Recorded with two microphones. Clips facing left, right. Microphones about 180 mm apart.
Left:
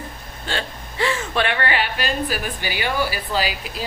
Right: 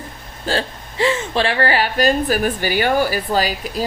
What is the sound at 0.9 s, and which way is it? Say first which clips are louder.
A woman's voice: right 4 dB; 20° right (ahead or behind).